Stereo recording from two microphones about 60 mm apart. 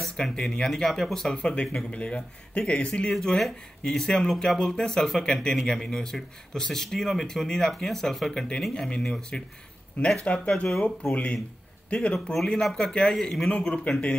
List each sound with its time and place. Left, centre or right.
0.0 s speech: centre
3.2 s speech: centre
11.9 s speech: centre